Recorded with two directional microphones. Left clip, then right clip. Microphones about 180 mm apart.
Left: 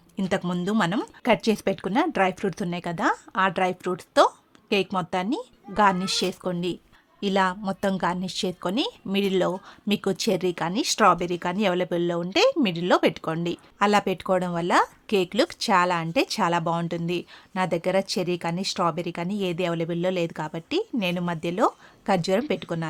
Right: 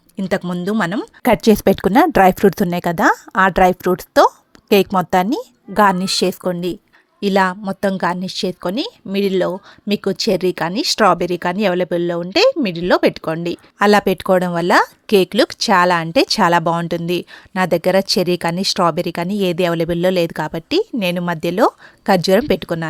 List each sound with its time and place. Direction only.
0.4 s speech: 20° right (ahead or behind)
0.7 s speech: 30° right (ahead or behind)
1.2 s speech: 45° right (ahead or behind)